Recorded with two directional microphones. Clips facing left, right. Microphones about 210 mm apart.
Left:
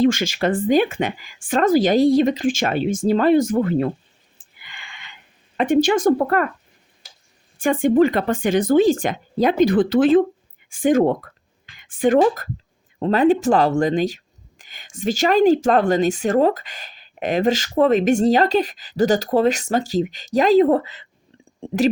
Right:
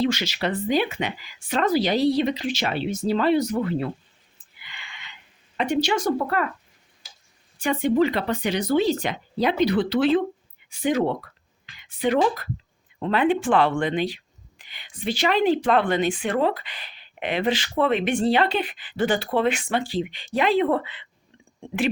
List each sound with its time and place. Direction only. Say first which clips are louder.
0.0 s speech: left 6 dB; 50° left (ahead or behind)
4.4 s a sound: left 2 dB; 50° left (ahead or behind)
5.5 s speech: left 6 dB; 50° left (ahead or behind)
7.6 s speech: left 5 dB; 50° left (ahead or behind)